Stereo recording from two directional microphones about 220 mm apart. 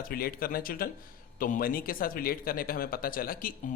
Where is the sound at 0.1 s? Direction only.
40° left (ahead or behind).